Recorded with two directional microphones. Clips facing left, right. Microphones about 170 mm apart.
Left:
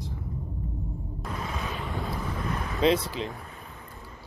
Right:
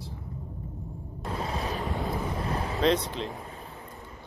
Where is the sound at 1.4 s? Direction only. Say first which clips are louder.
Right 3 dB; 35° right (ahead or behind).